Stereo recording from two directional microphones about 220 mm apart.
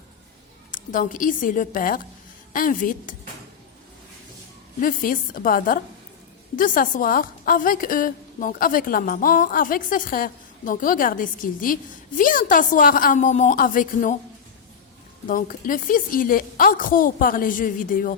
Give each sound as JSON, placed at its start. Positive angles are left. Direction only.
{"t": 0.7, "sound": "a woman's voice", "side_deg": 35}
{"t": 4.8, "sound": "a woman's voice", "side_deg": 40}
{"t": 15.3, "sound": "a woman's voice", "side_deg": 40}